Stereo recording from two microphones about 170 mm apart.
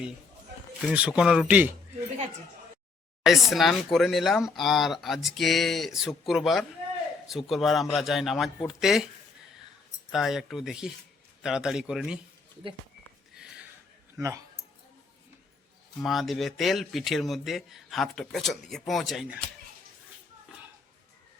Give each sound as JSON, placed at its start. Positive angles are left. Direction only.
{"t": 0.9, "sound": "speech", "side_deg": -5}
{"t": 3.2, "sound": "speech", "side_deg": 0}
{"t": 10.1, "sound": "speech", "side_deg": 0}
{"t": 13.3, "sound": "a sound", "side_deg": -5}
{"t": 14.2, "sound": "speech", "side_deg": -15}
{"t": 16.0, "sound": "speech", "side_deg": 0}